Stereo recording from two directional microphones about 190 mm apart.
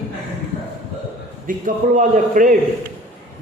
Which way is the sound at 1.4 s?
45° right (ahead or behind).